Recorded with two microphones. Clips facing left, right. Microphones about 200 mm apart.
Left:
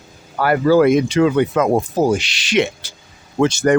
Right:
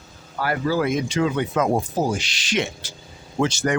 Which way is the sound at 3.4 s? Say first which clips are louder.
Left 7 dB; 55° left (ahead or behind).